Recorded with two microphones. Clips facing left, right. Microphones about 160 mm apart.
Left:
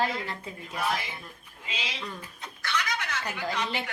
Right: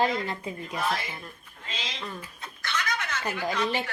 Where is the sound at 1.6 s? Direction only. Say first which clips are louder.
Even; 10° left (ahead or behind).